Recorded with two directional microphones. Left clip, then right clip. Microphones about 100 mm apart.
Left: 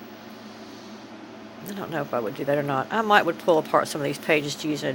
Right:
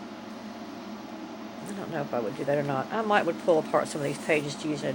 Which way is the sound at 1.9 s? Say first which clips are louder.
Left 3 dB; 35° left (ahead or behind).